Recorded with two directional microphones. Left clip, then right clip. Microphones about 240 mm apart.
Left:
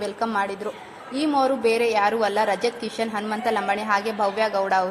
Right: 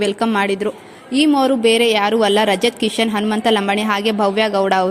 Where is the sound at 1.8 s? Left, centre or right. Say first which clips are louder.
Right 6 dB; right.